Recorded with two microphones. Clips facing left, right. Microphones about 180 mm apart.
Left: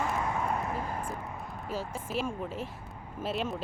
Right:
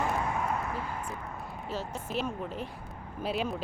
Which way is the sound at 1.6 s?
10° left (ahead or behind).